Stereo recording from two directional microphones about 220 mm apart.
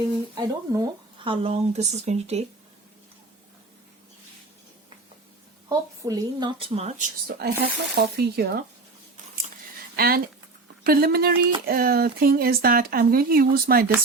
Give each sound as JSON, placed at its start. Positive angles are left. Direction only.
{"t": 0.3, "sound": "speech", "side_deg": -15}
{"t": 5.6, "sound": "speech", "side_deg": -15}
{"t": 7.3, "sound": "speech", "side_deg": -45}
{"t": 9.9, "sound": "speech", "side_deg": -40}